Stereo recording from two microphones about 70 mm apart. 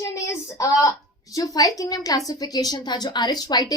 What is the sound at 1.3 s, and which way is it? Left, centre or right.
A woman's voice, left.